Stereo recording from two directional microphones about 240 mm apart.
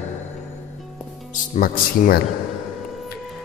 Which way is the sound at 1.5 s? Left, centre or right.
Left.